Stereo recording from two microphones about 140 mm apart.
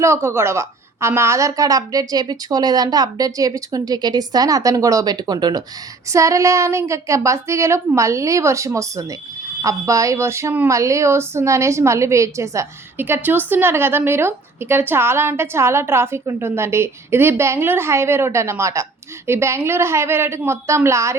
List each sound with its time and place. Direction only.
0.0 s a woman's voice: 20° right (ahead or behind)